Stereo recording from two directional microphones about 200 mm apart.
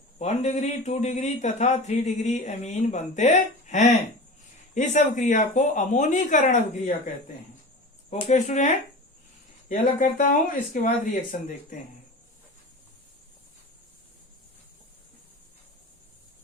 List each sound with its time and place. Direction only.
0.2 s speech: 35° left (ahead or behind)
8.1 s speech: 35° left (ahead or behind)